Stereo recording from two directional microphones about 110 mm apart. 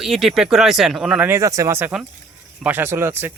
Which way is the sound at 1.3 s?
30° right (ahead or behind).